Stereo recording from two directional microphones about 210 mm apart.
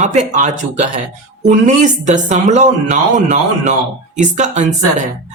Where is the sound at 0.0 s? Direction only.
35° right (ahead or behind).